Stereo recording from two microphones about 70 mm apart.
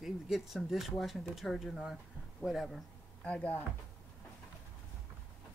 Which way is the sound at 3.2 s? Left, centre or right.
Centre.